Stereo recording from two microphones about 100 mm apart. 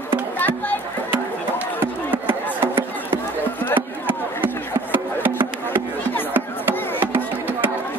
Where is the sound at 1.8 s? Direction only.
20° right (ahead or behind).